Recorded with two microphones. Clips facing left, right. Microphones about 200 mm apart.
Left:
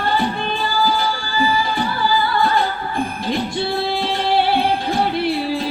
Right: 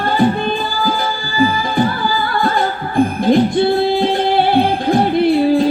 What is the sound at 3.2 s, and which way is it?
Music, 50° right (ahead or behind).